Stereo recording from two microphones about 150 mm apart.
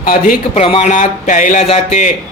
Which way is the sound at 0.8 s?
55° left (ahead or behind).